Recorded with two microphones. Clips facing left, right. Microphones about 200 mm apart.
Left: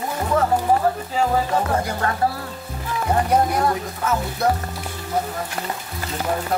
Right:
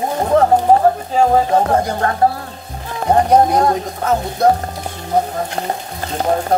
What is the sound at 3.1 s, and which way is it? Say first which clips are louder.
Speech: right 7 dB; 40° right (ahead or behind).